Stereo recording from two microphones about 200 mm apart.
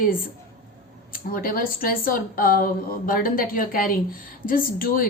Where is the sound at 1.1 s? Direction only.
45° left (ahead or behind).